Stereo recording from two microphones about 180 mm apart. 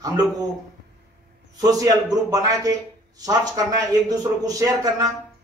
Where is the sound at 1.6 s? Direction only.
20° right (ahead or behind).